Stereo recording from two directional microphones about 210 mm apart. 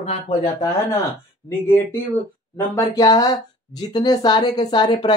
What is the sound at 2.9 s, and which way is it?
A woman's voice, 15° left (ahead or behind).